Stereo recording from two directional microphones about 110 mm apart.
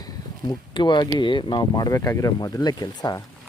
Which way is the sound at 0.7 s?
45° left (ahead or behind).